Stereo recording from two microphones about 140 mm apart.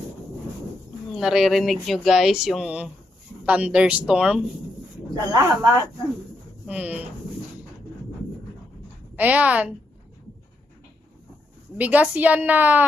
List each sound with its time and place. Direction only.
1.1 s a woman's voice: centre (ahead or behind)
5.1 s a woman's voice: 20° right (ahead or behind)
9.1 s a woman's voice: 10° right (ahead or behind)
11.8 s a woman's voice: 10° right (ahead or behind)